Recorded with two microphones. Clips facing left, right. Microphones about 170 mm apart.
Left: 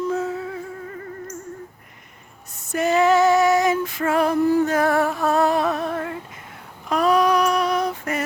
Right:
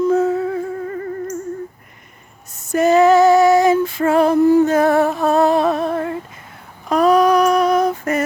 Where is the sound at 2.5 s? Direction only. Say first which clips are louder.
Right 7 dB; 45° right (ahead or behind).